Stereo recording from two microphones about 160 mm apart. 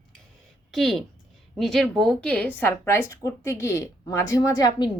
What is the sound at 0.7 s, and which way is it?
A woman's voice, centre (ahead or behind).